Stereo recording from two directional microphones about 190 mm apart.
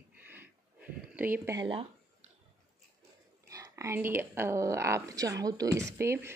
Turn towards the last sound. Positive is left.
turn(degrees=-15)  # may be behind; listen again after turning